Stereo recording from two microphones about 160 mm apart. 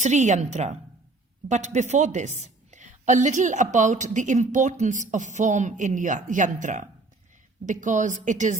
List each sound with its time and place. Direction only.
0.0 s a woman's voice: 50° right (ahead or behind)